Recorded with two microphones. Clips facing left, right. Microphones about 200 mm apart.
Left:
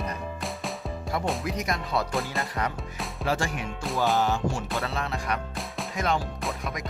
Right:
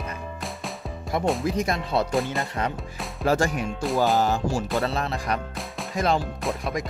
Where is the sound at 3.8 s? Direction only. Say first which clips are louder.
Right 4 dB; centre (ahead or behind).